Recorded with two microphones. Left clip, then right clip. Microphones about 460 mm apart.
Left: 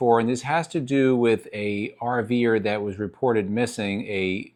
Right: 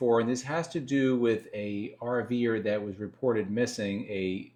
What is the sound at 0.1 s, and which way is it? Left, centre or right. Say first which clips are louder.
Speech: left 6 dB; left.